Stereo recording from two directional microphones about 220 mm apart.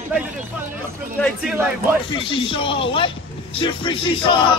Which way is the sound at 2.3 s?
25° left (ahead or behind).